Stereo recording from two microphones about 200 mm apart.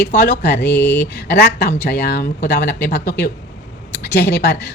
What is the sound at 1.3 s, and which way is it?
A woman's voice, 55° left (ahead or behind).